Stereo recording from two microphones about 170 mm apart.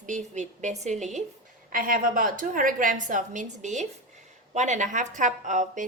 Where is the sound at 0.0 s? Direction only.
45° right (ahead or behind).